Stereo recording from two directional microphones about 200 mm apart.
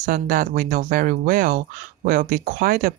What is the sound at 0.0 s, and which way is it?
Speech, 40° right (ahead or behind).